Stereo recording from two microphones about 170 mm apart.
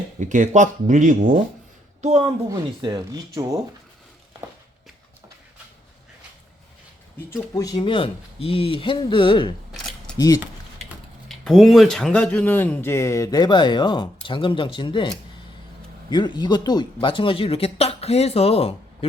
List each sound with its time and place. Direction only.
0.2 s speech: 45° right (ahead or behind)
2.5 s speech: 20° right (ahead or behind)
7.5 s speech: 20° left (ahead or behind)
10.8 s speech: centre (ahead or behind); by 18.7 s 35° left (ahead or behind)